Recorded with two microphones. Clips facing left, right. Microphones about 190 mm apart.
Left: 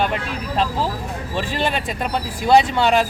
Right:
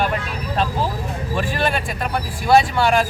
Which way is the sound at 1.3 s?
20° left (ahead or behind).